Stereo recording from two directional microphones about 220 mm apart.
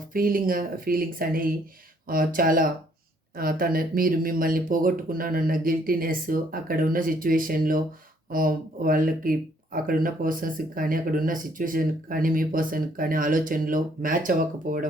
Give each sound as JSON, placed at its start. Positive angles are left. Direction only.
{"t": 0.1, "sound": "speech", "side_deg": -40}